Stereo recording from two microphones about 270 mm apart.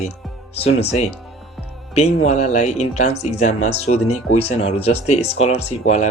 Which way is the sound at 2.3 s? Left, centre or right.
Left.